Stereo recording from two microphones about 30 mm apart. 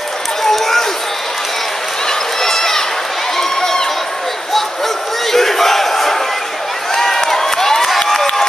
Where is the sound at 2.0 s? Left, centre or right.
Centre.